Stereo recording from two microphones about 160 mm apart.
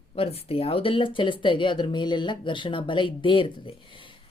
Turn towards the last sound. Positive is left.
turn(degrees=30)  # may be behind; listen again after turning